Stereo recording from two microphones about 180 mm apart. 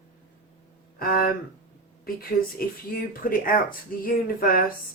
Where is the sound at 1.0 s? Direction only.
55° left (ahead or behind).